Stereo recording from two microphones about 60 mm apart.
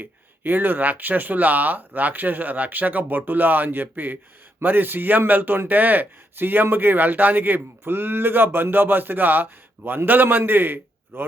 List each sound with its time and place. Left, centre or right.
0.0 s speech: right